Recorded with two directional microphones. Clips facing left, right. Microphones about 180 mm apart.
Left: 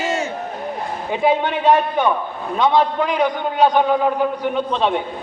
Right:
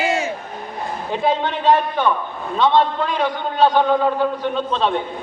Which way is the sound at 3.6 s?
15° left (ahead or behind).